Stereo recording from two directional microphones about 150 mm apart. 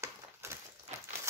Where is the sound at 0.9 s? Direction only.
45° right (ahead or behind).